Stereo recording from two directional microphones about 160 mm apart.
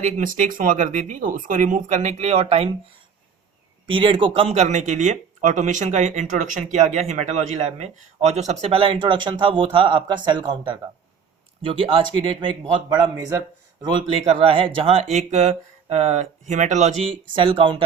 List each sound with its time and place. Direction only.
0.0 s speech: 55° right (ahead or behind); by 2.7 s 35° right (ahead or behind)
3.8 s speech: 30° right (ahead or behind)
14.3 s speech: 40° right (ahead or behind)
17.3 s speech: 30° right (ahead or behind)